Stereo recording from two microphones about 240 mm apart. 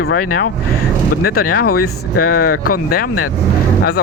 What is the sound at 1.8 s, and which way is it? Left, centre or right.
Speech, left.